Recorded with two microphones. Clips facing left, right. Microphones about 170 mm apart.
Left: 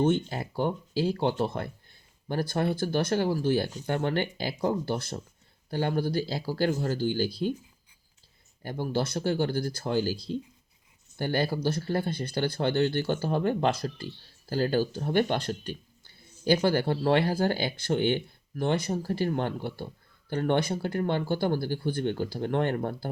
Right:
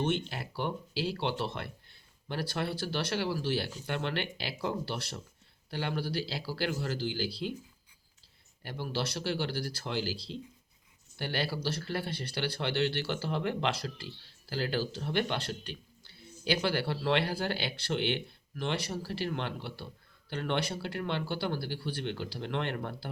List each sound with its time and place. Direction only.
0.0 s speech: 45° left (ahead or behind)
1.9 s a sound: 45° left (ahead or behind)
2.7 s speech: 45° left (ahead or behind)
8.6 s speech: 45° left (ahead or behind)